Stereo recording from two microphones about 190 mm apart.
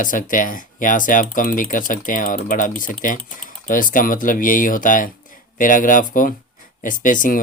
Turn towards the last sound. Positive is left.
turn(degrees=45)  # may be behind; listen again after turning